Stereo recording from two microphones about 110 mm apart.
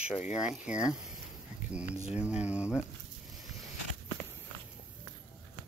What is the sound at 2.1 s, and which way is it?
Speech, 10° right (ahead or behind).